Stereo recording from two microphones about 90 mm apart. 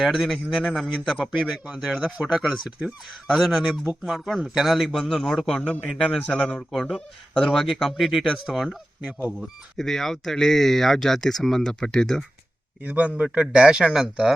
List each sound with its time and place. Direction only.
0.0 s a man's voice: centre (ahead or behind)
12.8 s speech: 15° right (ahead or behind)